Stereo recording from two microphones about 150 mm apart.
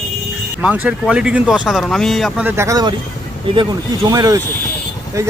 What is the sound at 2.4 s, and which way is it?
Speech, 20° right (ahead or behind).